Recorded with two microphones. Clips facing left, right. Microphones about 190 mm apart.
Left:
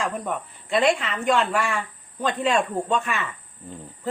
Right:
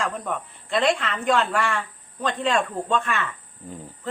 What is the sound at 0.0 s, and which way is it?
Speech, centre (ahead or behind).